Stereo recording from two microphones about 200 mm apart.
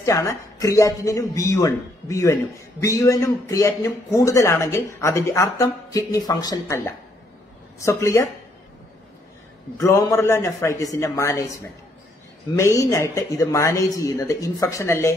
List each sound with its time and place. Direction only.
0.0 s a man's voice: 15° left (ahead or behind)
9.8 s a man's voice: 15° left (ahead or behind)